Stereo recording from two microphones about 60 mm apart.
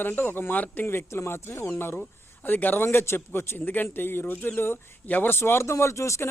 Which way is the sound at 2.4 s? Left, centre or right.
Left.